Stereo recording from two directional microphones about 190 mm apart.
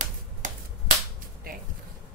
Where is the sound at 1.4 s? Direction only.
50° right (ahead or behind).